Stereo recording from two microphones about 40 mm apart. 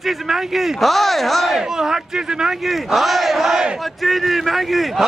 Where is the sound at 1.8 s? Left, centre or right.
Centre.